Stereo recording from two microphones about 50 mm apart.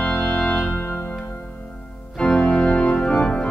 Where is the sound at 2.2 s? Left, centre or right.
Centre.